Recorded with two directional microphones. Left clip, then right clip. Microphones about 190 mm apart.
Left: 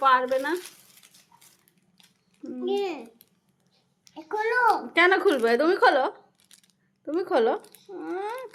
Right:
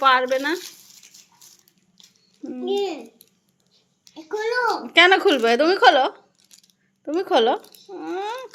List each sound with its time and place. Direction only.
0.0 s speech: 20° right (ahead or behind)
2.4 s speech: 5° right (ahead or behind)
4.0 s a child's voice: 5° left (ahead or behind)
4.9 s a woman's voice: 10° right (ahead or behind)